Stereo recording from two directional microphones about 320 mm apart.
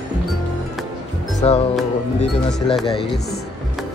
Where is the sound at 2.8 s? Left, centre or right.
Centre.